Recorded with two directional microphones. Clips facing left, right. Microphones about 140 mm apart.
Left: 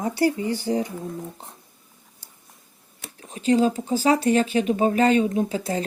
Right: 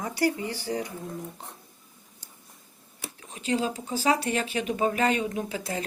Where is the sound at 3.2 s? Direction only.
35° left (ahead or behind).